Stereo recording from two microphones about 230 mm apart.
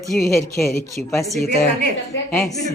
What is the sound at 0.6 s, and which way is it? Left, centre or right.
Speech, centre.